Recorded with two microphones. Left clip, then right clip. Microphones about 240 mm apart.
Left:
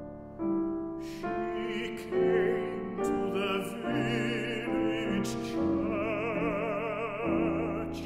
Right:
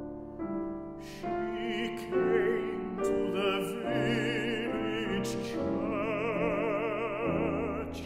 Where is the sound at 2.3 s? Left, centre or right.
Right.